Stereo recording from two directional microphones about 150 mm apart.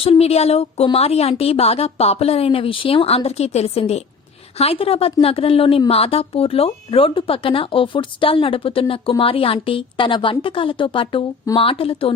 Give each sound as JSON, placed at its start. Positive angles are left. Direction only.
{"t": 0.0, "sound": "speech", "side_deg": 40}